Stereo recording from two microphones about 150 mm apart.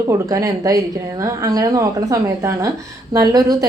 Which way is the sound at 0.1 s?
20° right (ahead or behind).